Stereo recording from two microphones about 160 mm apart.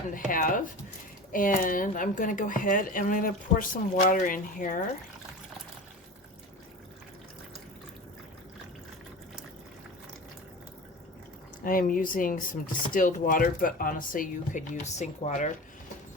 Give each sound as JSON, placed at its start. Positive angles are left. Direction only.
{"t": 0.1, "sound": "speech", "side_deg": 60}
{"t": 11.6, "sound": "speech", "side_deg": 60}